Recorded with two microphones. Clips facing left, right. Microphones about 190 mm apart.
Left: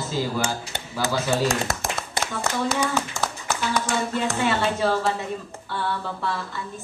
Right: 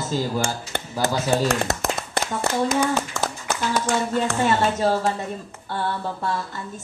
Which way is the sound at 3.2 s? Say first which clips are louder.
Right 2 dB; 55° right (ahead or behind).